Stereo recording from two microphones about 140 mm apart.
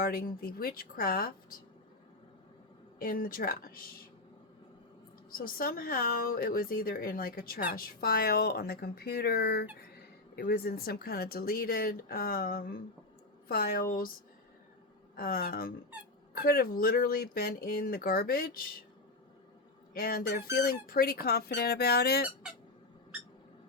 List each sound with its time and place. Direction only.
0.0 s speech: 90° left
3.0 s speech: 90° left
5.3 s speech: 90° left
15.1 s a woman's voice: 90° left
19.9 s speech: 90° left